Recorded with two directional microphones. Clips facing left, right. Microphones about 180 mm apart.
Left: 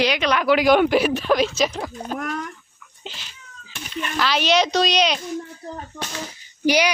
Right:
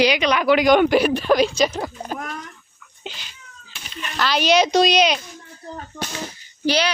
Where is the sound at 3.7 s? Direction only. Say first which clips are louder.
Left 6 dB; 55° left (ahead or behind).